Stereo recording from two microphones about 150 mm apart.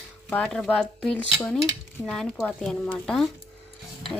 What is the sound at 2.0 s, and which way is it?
Speech, 20° left (ahead or behind).